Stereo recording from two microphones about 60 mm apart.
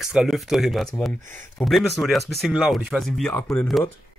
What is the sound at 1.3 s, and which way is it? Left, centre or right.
Speech, left.